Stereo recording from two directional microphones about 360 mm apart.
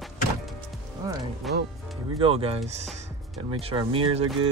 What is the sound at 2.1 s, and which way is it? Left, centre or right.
Speech, centre.